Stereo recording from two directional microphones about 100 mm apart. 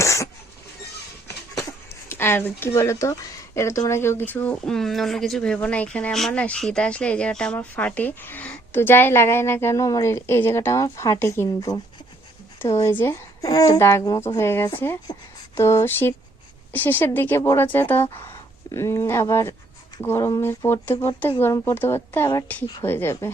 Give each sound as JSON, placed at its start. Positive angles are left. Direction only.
{"t": 0.0, "sound": "cough", "side_deg": 30}
{"t": 2.0, "sound": "speech", "side_deg": 25}
{"t": 4.6, "sound": "speech", "side_deg": 5}
{"t": 12.5, "sound": "speech", "side_deg": 30}
{"t": 13.4, "sound": "speech", "side_deg": 35}
{"t": 15.1, "sound": "speech", "side_deg": 45}
{"t": 15.5, "sound": "speech", "side_deg": 25}